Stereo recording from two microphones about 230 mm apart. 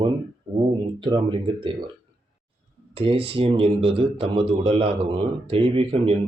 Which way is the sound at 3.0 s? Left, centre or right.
Right.